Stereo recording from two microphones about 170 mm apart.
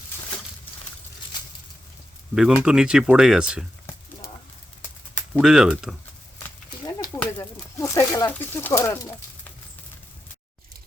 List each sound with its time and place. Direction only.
2.3 s speech: 5° right (ahead or behind)
5.3 s speech: 5° right (ahead or behind)
7.2 s speech: 15° left (ahead or behind)